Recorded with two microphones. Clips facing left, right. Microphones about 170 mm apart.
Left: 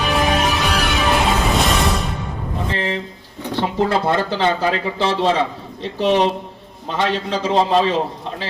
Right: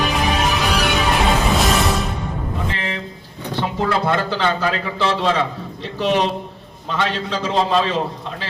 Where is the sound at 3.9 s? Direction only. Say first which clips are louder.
Left 1 dB; 25° left (ahead or behind).